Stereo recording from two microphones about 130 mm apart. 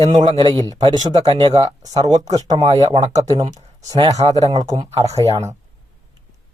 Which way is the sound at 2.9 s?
60° right (ahead or behind).